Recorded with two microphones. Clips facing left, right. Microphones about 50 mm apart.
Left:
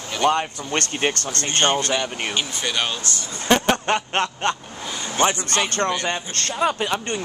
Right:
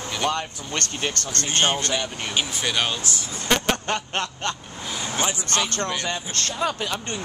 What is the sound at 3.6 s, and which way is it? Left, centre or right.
Speech, left.